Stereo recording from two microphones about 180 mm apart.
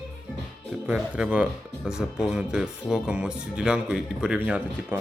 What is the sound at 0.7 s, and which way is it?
A man's voice, 5° right (ahead or behind).